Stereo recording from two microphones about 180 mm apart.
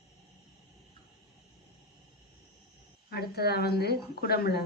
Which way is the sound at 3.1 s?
60° left (ahead or behind).